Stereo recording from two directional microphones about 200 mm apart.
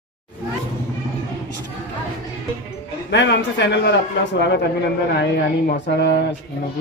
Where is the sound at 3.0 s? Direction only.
60° left (ahead or behind).